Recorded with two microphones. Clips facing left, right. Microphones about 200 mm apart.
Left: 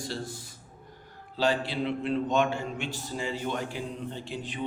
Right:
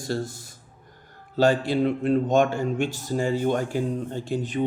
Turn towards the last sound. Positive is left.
turn(degrees=-45)  # may be behind; listen again after turning